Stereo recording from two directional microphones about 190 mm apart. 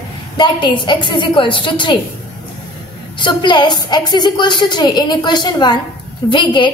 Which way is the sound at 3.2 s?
25° left (ahead or behind).